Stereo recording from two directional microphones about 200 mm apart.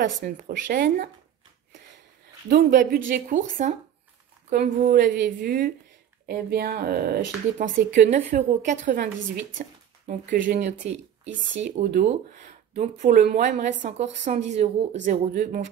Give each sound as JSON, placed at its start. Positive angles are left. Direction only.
{"t": 0.2, "sound": "a woman's voice", "side_deg": -45}
{"t": 2.5, "sound": "a woman's voice", "side_deg": -45}
{"t": 7.5, "sound": "speech", "side_deg": -40}
{"t": 10.0, "sound": "speech", "side_deg": -45}
{"t": 15.0, "sound": "speech", "side_deg": -40}